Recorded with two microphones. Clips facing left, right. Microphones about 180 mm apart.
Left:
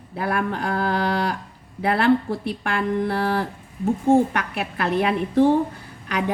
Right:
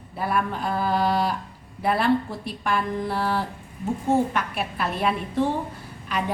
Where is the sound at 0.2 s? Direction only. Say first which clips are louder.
Left 2 dB; 65° left (ahead or behind).